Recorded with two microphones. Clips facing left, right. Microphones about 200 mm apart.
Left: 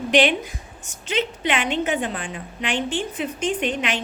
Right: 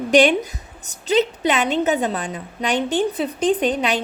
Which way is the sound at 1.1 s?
40° right (ahead or behind).